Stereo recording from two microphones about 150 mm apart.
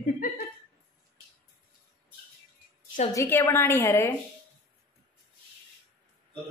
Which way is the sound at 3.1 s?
15° left (ahead or behind).